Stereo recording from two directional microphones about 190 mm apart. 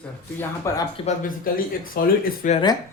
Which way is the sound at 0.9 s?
40° left (ahead or behind).